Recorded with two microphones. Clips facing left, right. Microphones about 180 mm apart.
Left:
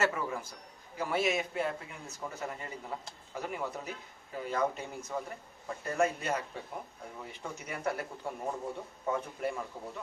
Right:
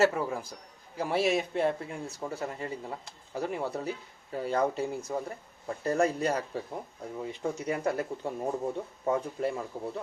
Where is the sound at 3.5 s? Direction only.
35° right (ahead or behind).